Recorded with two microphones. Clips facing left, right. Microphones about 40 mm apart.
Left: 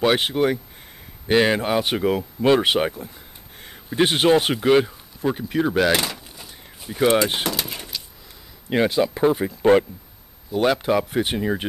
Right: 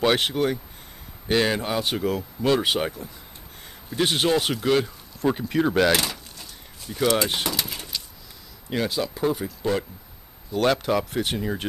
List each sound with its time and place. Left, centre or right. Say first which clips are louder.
0.0 s speech: left 2 dB; centre
5.2 s speech: even; centre
5.9 s a sound: left 1 dB; centre
7.2 s pigeon: left 3 dB; centre
8.6 s speech: left 6 dB; left
10.5 s speech: left 2 dB; centre